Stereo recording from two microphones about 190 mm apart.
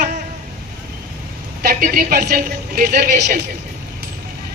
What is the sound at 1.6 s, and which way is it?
Speech, 50° right (ahead or behind).